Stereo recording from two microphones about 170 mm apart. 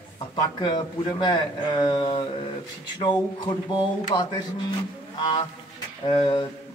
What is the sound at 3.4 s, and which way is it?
Speech, 25° left (ahead or behind).